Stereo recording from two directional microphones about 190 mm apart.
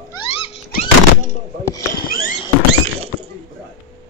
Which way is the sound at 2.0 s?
50° left (ahead or behind).